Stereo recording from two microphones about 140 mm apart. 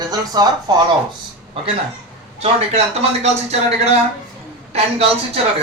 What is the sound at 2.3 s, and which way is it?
Speech, 50° right (ahead or behind).